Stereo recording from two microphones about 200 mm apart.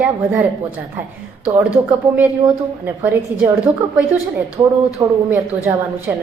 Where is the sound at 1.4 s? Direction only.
10° right (ahead or behind).